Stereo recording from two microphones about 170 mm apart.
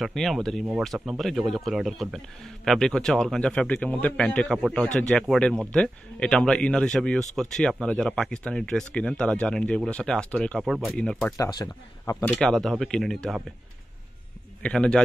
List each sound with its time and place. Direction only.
0.0 s speech: centre (ahead or behind)
11.3 s speech: 20° left (ahead or behind)
12.3 s speech: 5° left (ahead or behind)
14.6 s speech: 5° left (ahead or behind)